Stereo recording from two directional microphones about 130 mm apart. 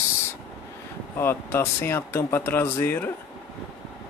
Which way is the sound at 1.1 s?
20° left (ahead or behind).